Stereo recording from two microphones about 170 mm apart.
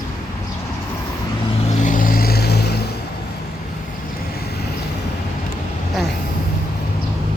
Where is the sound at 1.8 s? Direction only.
50° left (ahead or behind); by 2.7 s 75° left (ahead or behind).